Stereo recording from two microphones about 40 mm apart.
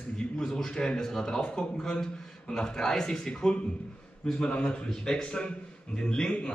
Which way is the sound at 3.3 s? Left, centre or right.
Left.